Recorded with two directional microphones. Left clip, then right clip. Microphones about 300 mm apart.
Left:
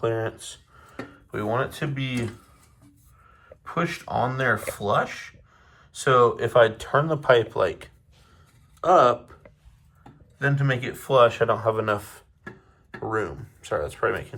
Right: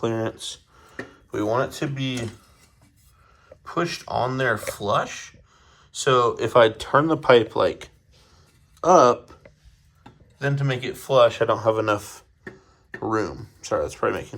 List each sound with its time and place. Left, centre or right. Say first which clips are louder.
0.0 s speech: even; centre
3.6 s speech: right 1 dB; centre
4.7 s a sound: even; centre
6.0 s speech: left 1 dB; centre
8.8 s speech: right 2 dB; centre
10.3 s speech: left 1 dB; centre